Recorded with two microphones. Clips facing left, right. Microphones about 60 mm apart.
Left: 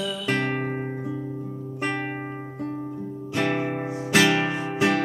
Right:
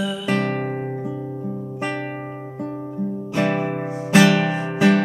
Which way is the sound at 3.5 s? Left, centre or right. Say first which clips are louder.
Right 3 dB; centre.